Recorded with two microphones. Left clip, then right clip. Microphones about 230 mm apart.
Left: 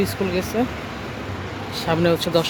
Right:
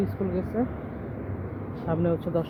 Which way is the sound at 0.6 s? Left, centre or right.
Left.